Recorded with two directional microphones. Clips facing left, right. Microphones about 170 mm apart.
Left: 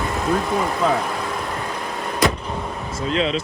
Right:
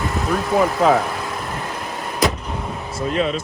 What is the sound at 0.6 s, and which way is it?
Vehicle, 75° right (ahead or behind).